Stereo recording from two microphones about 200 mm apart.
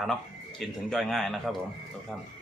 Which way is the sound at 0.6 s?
Centre (ahead or behind).